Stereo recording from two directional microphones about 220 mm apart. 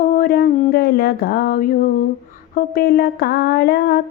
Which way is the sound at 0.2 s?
45° left (ahead or behind).